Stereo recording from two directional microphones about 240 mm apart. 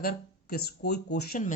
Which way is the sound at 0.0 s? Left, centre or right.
Left.